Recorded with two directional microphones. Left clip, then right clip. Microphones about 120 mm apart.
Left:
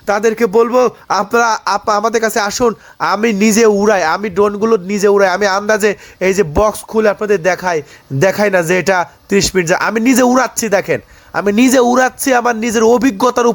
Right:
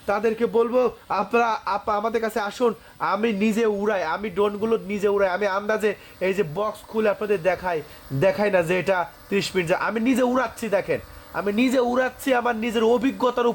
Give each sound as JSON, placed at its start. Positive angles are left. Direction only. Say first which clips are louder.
{"t": 0.0, "sound": "a man's voice", "louder": "left 9 dB", "side_deg": 25}
{"t": 0.3, "sound": "speech", "louder": "left 10 dB", "side_deg": 55}
{"t": 1.1, "sound": "a man's voice", "louder": "left 9 dB", "side_deg": 25}
{"t": 6.6, "sound": "speech", "louder": "left 13 dB", "side_deg": 60}
{"t": 7.0, "sound": "a man's voice", "louder": "left 9 dB", "side_deg": 30}
{"t": 11.9, "sound": "speech", "louder": "left 10 dB", "side_deg": 40}